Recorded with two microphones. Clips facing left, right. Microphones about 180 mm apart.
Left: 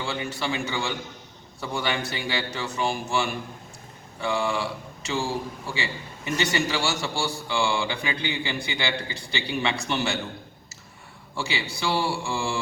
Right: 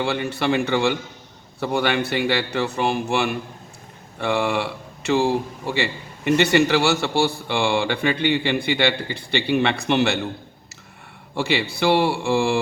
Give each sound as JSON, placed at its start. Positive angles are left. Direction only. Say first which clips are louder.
{"t": 0.0, "sound": "speech", "louder": "right 7 dB", "side_deg": -60}
{"t": 11.3, "sound": "speech", "louder": "right 8 dB", "side_deg": -60}